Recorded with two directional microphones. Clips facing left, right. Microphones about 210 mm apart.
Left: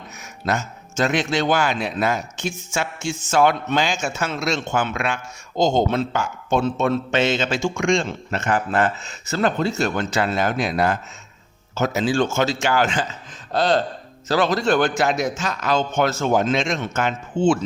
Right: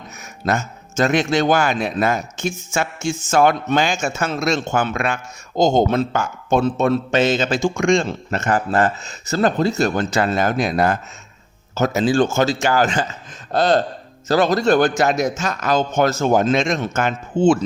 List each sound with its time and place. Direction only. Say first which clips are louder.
0.4 s a man's voice: right 3 dB; 45° right (ahead or behind)